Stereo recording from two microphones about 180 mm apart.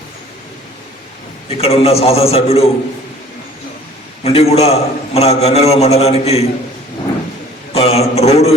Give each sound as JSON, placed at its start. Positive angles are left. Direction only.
{"t": 1.5, "sound": "a man's voice", "side_deg": 35}
{"t": 4.2, "sound": "a man's voice", "side_deg": 35}
{"t": 7.7, "sound": "a sound", "side_deg": 35}